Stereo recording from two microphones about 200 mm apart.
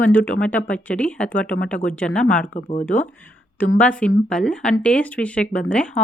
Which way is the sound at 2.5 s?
35° left (ahead or behind).